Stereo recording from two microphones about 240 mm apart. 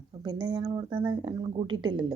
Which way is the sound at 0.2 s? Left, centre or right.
Centre.